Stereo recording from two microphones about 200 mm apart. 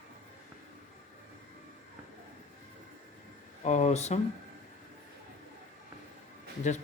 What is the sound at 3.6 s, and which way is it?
Speech, 35° left (ahead or behind).